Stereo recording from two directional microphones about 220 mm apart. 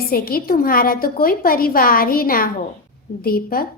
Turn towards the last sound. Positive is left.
turn(degrees=40)  # may be behind; listen again after turning